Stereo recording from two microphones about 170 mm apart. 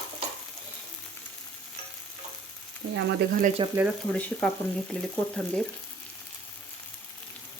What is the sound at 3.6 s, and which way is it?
Speech, 25° right (ahead or behind).